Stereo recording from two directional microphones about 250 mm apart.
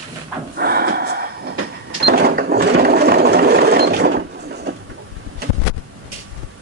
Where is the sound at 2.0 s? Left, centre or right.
Right.